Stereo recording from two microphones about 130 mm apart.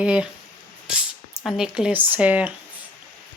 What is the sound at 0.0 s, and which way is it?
Speech, 5° right (ahead or behind).